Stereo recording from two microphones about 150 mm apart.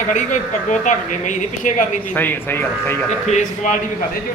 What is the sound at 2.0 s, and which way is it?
A man's voice, 10° left (ahead or behind).